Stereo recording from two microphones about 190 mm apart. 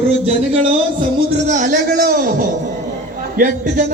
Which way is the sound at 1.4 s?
40° right (ahead or behind).